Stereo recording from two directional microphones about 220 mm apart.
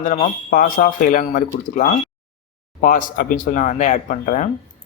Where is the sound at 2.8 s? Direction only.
40° left (ahead or behind).